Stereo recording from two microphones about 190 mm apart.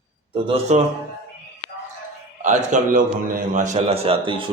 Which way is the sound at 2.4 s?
40° right (ahead or behind).